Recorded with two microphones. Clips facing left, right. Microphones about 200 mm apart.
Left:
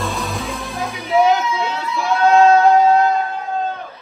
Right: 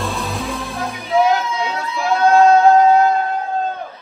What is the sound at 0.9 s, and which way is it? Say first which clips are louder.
Music: left 1 dB; 15° left (ahead or behind).